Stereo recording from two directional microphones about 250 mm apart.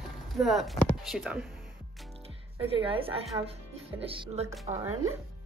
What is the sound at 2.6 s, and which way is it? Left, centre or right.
A woman's voice, right.